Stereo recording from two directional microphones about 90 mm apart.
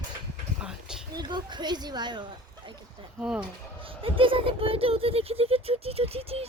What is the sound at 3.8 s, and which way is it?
Speech, 80° right.